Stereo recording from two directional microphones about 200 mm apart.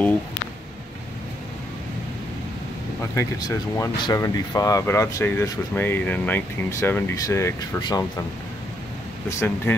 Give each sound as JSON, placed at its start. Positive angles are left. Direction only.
{"t": 3.2, "sound": "speech", "side_deg": 15}
{"t": 9.3, "sound": "speech", "side_deg": 15}